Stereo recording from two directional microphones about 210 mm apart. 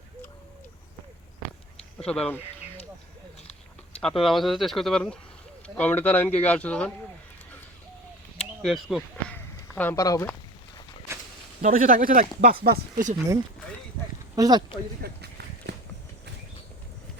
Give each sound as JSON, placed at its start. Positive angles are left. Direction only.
{"t": 2.0, "sound": "speech", "side_deg": 5}
{"t": 4.0, "sound": "a man's voice", "side_deg": 0}
{"t": 8.4, "sound": "a sound", "side_deg": 0}
{"t": 9.7, "sound": "a man's voice", "side_deg": 10}
{"t": 11.6, "sound": "speech", "side_deg": -40}
{"t": 14.3, "sound": "speech", "side_deg": -20}
{"t": 15.0, "sound": "a sound", "side_deg": -50}